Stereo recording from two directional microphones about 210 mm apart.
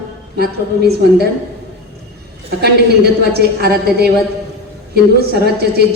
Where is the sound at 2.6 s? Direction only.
50° right (ahead or behind).